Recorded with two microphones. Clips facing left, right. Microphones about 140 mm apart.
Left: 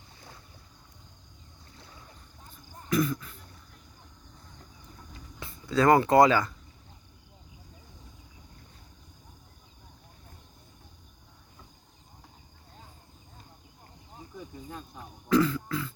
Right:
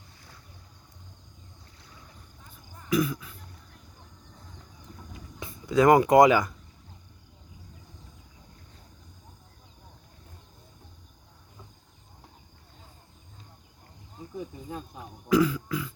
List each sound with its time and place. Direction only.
2.9 s speech: 10° right (ahead or behind)
5.1 s a sound: 15° right (ahead or behind)
14.3 s throat clearing: 20° right (ahead or behind)